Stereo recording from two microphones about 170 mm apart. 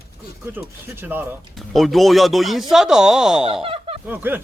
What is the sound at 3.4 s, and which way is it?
Speech, 35° right (ahead or behind).